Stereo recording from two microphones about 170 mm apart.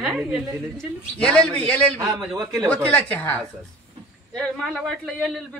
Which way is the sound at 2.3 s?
20° right (ahead or behind).